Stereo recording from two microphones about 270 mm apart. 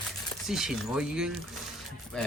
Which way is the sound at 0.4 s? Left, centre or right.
Centre.